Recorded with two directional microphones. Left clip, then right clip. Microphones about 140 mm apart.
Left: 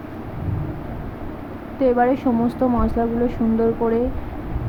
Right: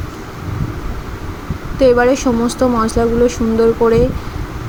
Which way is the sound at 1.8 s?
25° right (ahead or behind).